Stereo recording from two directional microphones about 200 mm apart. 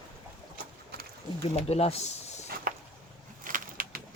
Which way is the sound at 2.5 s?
45° right (ahead or behind).